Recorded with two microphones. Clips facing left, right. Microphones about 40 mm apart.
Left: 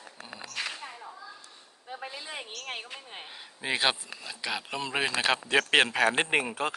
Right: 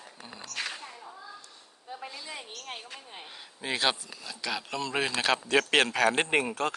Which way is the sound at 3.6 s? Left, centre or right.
Centre.